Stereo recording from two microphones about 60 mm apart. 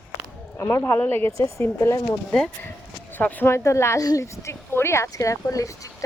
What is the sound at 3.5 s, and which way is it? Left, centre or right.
Speech, left.